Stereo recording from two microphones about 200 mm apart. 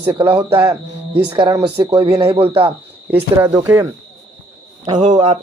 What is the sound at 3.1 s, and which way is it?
Speech, 10° right (ahead or behind).